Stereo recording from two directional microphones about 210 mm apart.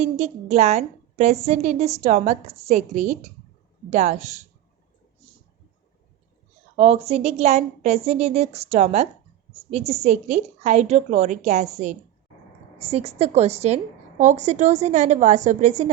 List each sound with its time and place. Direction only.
0.0 s a woman's voice: 30° right (ahead or behind)
6.7 s a woman's voice: 30° right (ahead or behind)
12.8 s a woman's voice: 30° right (ahead or behind)